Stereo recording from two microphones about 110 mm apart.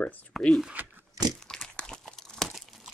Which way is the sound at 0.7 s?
15° right (ahead or behind).